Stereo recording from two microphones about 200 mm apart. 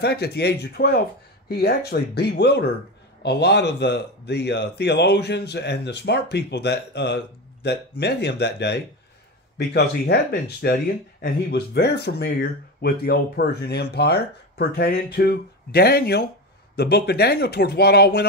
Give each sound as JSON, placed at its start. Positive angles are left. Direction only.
{"t": 0.0, "sound": "speech", "side_deg": 55}